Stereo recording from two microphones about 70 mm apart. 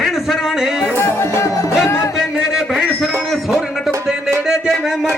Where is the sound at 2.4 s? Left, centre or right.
Centre.